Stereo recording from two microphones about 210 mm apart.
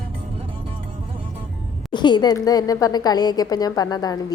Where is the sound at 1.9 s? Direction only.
20° left (ahead or behind).